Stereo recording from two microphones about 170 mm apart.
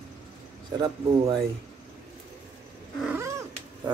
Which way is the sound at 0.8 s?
25° right (ahead or behind).